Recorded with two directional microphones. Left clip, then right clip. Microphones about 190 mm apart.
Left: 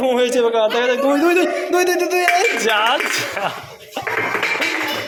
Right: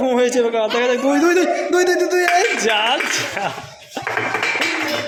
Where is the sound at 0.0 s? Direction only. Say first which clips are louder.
Even; 25° right (ahead or behind).